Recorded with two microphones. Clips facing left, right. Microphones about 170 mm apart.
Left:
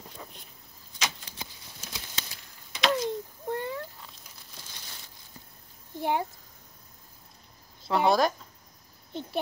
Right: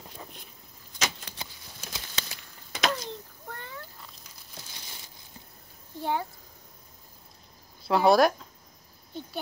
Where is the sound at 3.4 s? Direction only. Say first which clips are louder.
Left 13 dB; 20° left (ahead or behind).